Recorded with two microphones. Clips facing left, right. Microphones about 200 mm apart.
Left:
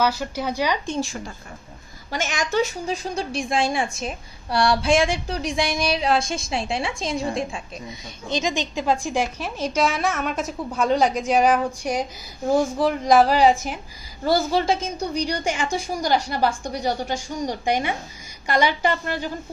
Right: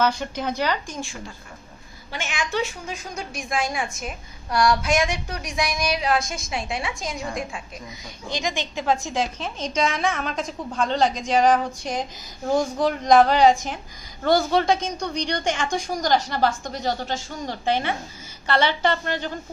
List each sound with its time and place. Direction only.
0.0 s a woman's voice: 10° left (ahead or behind)
2.0 s a woman's voice: 40° left (ahead or behind); by 19.3 s 10° left (ahead or behind)